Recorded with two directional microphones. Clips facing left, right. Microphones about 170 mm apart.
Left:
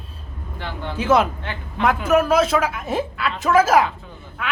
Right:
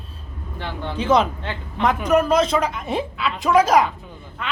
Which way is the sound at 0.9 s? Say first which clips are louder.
Left 1 dB; 5° left (ahead or behind).